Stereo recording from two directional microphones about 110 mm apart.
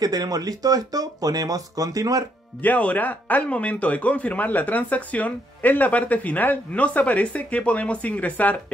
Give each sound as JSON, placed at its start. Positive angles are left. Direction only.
{"t": 0.0, "sound": "speech", "side_deg": -35}
{"t": 2.6, "sound": "speech", "side_deg": 15}